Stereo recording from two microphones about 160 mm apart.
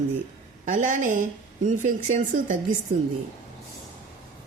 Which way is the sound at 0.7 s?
55° right (ahead or behind).